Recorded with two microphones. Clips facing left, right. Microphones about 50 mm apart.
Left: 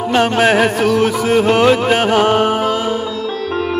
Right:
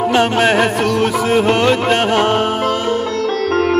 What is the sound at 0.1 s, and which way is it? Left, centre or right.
Music, centre.